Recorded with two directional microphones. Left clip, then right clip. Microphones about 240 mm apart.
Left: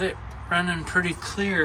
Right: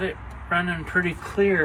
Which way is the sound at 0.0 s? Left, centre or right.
Centre.